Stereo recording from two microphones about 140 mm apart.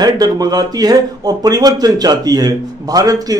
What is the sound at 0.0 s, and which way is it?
Speech, 25° right (ahead or behind).